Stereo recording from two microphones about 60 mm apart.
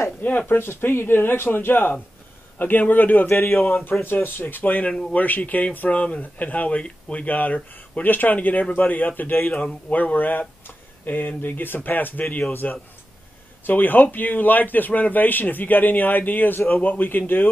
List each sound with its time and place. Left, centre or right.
0.2 s a man's voice: left
9.5 s speech: centre
9.8 s a man's voice: left